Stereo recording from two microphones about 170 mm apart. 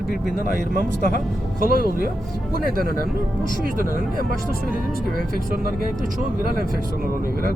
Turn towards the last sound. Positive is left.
turn(degrees=-60)  # may be behind; listen again after turning